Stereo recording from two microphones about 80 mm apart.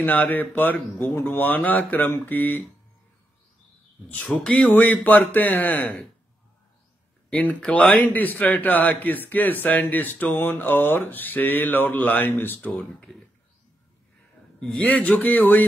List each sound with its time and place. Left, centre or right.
0.0 s a man's voice: left
4.1 s a man's voice: centre
7.2 s a man's voice: centre
12.7 s speech: centre
14.6 s speech: centre